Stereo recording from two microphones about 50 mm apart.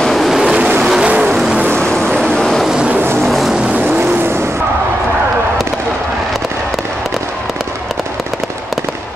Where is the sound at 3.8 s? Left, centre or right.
Right.